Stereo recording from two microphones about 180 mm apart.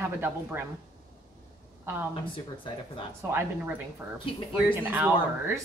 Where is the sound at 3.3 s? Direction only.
10° right (ahead or behind).